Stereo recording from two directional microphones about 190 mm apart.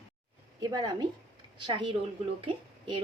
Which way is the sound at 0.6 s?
20° right (ahead or behind).